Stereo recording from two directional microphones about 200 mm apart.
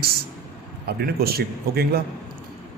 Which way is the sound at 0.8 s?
50° right (ahead or behind).